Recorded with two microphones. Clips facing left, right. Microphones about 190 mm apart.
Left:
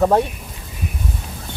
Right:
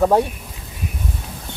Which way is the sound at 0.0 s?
10° right (ahead or behind).